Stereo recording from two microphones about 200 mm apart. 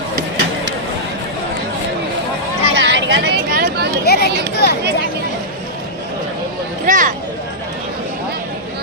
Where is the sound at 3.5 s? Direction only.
45° right (ahead or behind).